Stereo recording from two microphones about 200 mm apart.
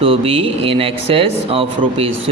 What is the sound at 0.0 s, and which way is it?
Speech, 30° right (ahead or behind).